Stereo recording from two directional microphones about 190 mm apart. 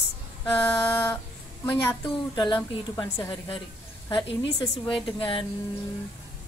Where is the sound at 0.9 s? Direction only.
10° left (ahead or behind); by 5.4 s 25° left (ahead or behind).